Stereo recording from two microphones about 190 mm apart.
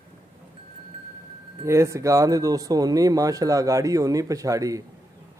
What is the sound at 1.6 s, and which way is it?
Speech, 15° right (ahead or behind).